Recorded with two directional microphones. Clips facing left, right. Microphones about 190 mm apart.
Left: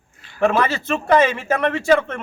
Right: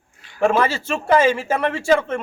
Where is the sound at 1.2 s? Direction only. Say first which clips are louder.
Right 2 dB; 30° right (ahead or behind).